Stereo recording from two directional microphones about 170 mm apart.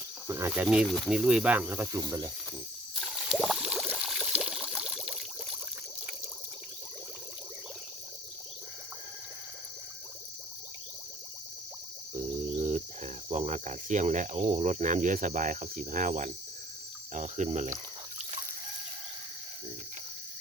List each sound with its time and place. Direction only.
0.3 s speech: 15° right (ahead or behind)
3.2 s a sound: centre (ahead or behind)
4.4 s water: 5° right (ahead or behind)
12.1 s cricket: 45° right (ahead or behind)